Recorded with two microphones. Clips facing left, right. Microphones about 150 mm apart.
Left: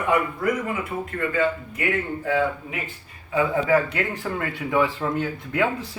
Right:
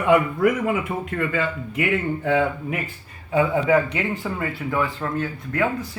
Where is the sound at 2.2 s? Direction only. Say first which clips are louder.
Even; 85° right.